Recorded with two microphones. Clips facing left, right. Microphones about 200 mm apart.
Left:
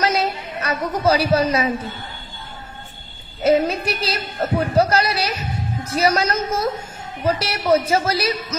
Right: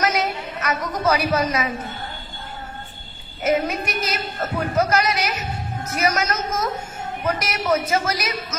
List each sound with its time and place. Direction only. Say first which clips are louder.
0.0 s a sound: left 2 dB; 30° left (ahead or behind)
1.0 s a woman's voice: left 3 dB; 30° left (ahead or behind)
3.4 s a woman's voice: left 4 dB; 30° left (ahead or behind)